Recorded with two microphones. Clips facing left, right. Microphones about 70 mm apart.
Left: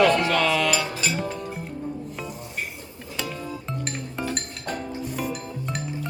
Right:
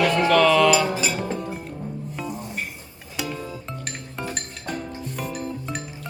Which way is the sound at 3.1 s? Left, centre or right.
Centre.